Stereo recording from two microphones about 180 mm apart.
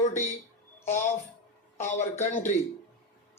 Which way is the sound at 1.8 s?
40° left (ahead or behind).